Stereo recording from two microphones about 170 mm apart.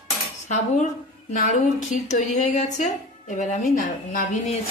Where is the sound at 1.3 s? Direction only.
50° left (ahead or behind).